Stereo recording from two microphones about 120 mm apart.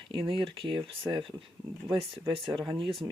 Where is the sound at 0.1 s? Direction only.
45° right (ahead or behind).